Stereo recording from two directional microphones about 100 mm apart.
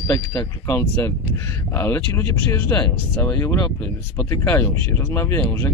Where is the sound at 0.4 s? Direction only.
25° left (ahead or behind).